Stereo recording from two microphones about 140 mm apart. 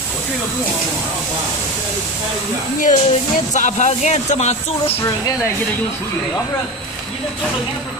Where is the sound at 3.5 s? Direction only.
60° left (ahead or behind).